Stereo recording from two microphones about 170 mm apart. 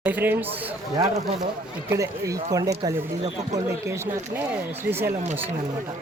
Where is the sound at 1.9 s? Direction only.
20° right (ahead or behind).